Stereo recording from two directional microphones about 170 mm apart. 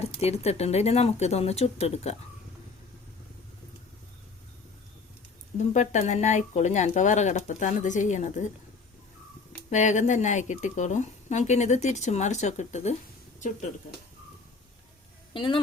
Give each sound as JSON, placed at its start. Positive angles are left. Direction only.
{"t": 0.0, "sound": "speech", "side_deg": 40}
{"t": 5.5, "sound": "speech", "side_deg": 45}
{"t": 9.6, "sound": "speech", "side_deg": 45}
{"t": 15.3, "sound": "speech", "side_deg": 30}